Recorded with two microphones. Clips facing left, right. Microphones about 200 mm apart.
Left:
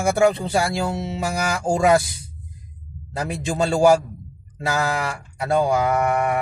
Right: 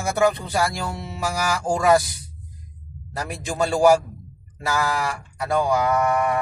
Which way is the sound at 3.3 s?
25° left (ahead or behind).